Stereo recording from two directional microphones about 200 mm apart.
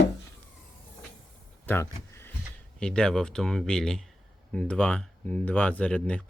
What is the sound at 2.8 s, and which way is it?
Speech, 5° left (ahead or behind).